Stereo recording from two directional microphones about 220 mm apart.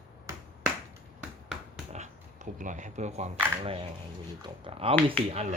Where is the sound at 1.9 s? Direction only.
35° right (ahead or behind).